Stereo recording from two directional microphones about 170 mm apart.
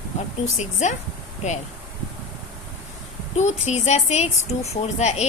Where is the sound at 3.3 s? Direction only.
40° left (ahead or behind).